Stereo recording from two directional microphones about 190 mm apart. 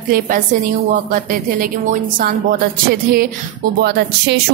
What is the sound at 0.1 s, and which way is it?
A woman's voice, 45° right (ahead or behind).